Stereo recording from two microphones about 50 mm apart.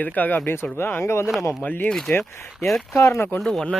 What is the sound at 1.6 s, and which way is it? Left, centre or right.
Speech, left.